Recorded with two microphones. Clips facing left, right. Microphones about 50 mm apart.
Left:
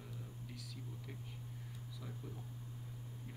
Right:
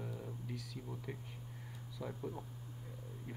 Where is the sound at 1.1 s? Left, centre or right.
Centre.